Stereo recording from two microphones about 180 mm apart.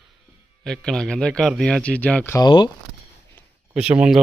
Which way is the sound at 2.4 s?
25° left (ahead or behind).